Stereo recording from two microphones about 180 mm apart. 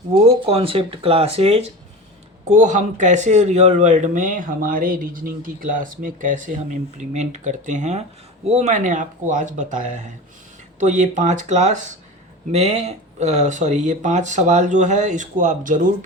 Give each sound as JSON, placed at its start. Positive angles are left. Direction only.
{"t": 0.3, "sound": "speech", "side_deg": -30}